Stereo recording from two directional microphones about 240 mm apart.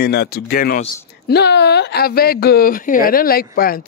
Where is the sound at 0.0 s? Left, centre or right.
Left.